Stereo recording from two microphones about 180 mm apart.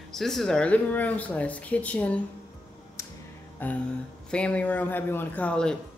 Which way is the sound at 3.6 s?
10° left (ahead or behind).